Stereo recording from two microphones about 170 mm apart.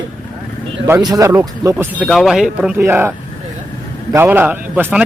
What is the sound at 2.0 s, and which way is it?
A man's voice, centre (ahead or behind).